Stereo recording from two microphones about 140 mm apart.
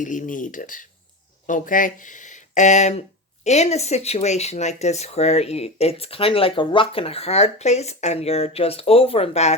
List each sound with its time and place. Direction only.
0.0 s speech: 65° left (ahead or behind); by 9.6 s 50° left (ahead or behind)